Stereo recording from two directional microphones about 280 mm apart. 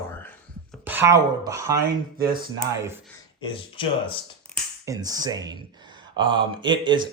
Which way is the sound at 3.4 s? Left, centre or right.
Centre.